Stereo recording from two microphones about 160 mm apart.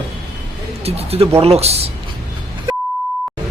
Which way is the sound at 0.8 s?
40° right (ahead or behind).